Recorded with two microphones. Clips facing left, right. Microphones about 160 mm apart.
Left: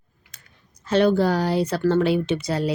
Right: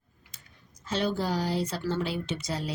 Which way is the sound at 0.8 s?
65° left (ahead or behind).